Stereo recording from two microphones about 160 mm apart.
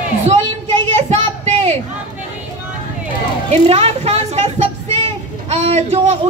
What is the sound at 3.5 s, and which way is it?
Speech, 40° right (ahead or behind).